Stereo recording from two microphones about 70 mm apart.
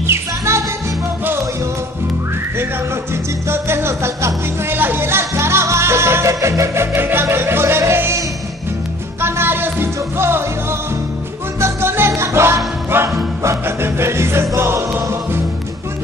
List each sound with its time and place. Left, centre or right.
0.0 s music: right
3.4 s music: right
9.2 s music: right